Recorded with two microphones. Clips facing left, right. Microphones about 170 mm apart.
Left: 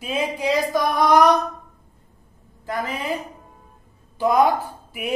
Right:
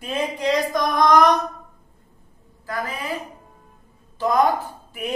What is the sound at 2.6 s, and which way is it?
Speech, 25° left (ahead or behind).